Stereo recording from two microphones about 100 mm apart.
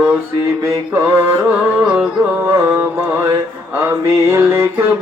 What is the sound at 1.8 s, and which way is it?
Carnatic music, 10° right (ahead or behind).